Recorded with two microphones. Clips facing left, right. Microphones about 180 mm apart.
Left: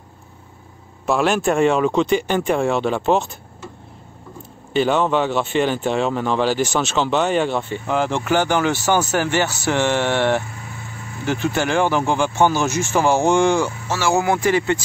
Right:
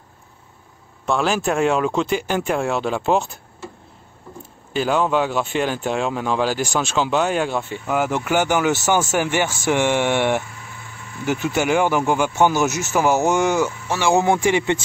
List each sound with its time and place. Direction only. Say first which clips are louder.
1.0 s speech: left 2 dB; centre (ahead or behind)
4.7 s speech: left 2 dB; 5° right (ahead or behind)
13.9 s speech: right 1 dB; 15° right (ahead or behind)